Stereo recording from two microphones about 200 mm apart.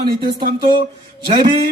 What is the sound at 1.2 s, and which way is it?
Speech, 25° right (ahead or behind).